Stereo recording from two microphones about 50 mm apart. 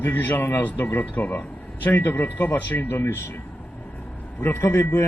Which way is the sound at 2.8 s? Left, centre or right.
Left.